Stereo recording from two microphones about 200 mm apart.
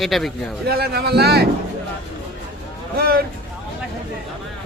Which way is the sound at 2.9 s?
50° right (ahead or behind).